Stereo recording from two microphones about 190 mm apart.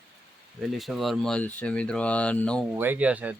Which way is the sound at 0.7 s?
Centre (ahead or behind).